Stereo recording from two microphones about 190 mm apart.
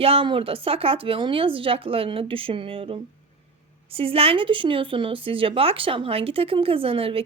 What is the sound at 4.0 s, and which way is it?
Speech, 30° right (ahead or behind).